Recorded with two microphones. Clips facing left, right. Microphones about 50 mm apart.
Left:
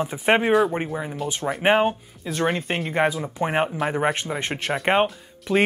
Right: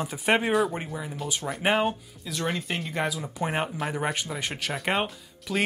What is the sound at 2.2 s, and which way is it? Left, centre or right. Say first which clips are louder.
Speech: left 6 dB; left.